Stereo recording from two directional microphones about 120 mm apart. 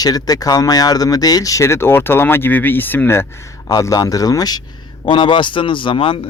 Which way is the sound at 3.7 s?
30° left (ahead or behind).